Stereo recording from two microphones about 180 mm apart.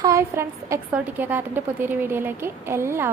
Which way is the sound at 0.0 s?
15° right (ahead or behind).